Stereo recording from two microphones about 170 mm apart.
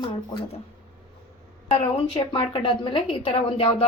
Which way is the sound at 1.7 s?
40° left (ahead or behind).